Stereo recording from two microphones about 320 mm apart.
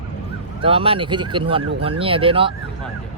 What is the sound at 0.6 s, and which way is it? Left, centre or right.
Speech, centre.